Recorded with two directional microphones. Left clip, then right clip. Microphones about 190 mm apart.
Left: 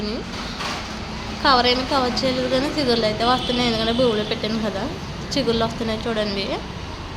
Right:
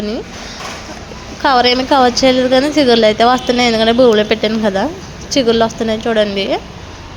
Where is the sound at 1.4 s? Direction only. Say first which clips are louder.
Right 6 dB; 40° right (ahead or behind).